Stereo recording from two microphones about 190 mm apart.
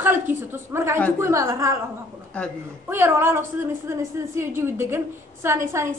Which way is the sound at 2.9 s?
10° right (ahead or behind).